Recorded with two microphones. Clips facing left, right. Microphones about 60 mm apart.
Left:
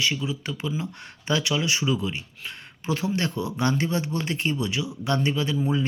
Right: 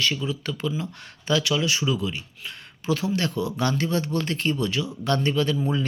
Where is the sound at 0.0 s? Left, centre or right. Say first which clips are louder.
Right 1 dB; centre.